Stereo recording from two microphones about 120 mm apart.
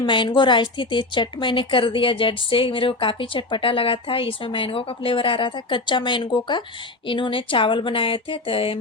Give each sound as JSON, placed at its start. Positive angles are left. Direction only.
{"t": 0.0, "sound": "a woman's voice", "side_deg": 40}